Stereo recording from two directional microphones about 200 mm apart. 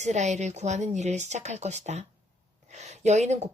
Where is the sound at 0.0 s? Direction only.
35° right (ahead or behind).